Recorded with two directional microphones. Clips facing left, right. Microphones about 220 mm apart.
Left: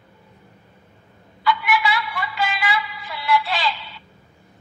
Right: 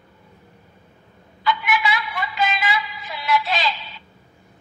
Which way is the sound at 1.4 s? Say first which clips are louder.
Left 1 dB; 20° right (ahead or behind).